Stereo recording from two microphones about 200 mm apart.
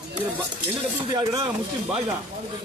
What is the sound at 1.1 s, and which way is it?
Speech, 20° right (ahead or behind).